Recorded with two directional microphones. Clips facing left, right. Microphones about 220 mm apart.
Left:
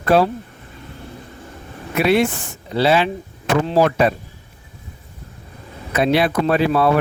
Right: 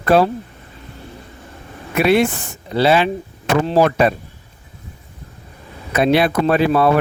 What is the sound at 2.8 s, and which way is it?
Speech, 55° right (ahead or behind).